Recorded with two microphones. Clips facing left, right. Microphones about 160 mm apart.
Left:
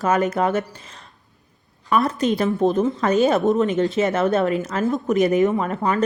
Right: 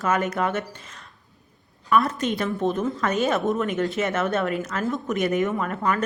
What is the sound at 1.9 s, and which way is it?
A man's voice, 35° left (ahead or behind).